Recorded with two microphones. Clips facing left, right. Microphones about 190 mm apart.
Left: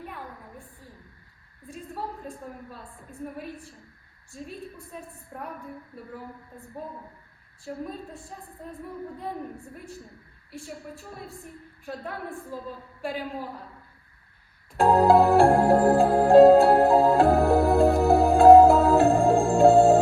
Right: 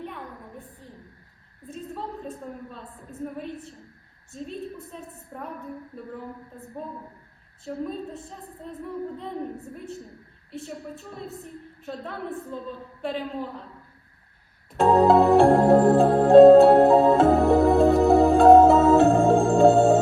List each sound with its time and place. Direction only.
0.0 s a sound: 5° left (ahead or behind)
4.9 s a woman's voice: 15° left (ahead or behind)
7.7 s a woman's voice: 5° left (ahead or behind)
11.4 s a woman's voice: 5° left (ahead or behind)
14.7 s music: centre (ahead or behind)